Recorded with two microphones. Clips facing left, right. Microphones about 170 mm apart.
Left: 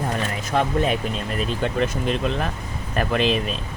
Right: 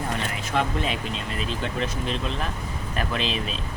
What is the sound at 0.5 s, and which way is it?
Speech, 40° left (ahead or behind).